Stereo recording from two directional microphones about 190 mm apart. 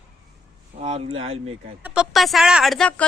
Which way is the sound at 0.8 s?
35° right (ahead or behind).